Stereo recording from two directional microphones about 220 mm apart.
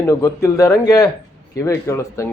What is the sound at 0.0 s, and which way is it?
A man's voice, 15° left (ahead or behind).